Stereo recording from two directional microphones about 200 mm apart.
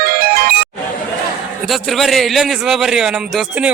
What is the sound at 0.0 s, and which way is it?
Music, 50° right (ahead or behind).